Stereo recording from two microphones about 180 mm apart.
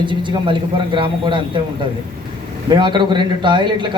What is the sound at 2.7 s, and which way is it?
A man's voice, 25° right (ahead or behind).